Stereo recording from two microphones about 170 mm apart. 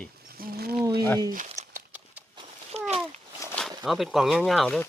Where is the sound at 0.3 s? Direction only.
60° right (ahead or behind).